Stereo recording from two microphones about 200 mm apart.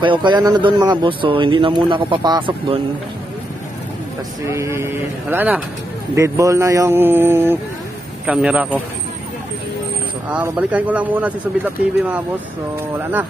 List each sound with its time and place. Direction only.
0.0 s speech: 25° right (ahead or behind)
4.5 s a man's voice: 15° right (ahead or behind)
10.3 s speech: 5° right (ahead or behind)